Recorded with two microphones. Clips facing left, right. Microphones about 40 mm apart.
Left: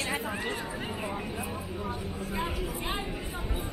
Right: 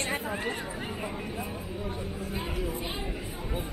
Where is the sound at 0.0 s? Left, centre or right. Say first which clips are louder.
Right 1 dB; centre.